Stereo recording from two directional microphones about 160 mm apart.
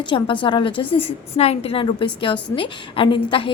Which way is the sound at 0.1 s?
30° left (ahead or behind).